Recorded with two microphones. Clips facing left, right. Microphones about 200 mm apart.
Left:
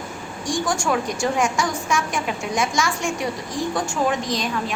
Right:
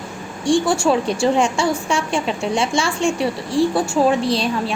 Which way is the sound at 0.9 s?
30° right (ahead or behind).